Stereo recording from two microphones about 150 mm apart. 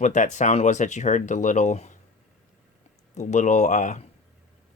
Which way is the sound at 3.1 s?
50° left (ahead or behind).